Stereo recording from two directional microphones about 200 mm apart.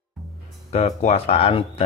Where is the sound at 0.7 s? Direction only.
30° left (ahead or behind).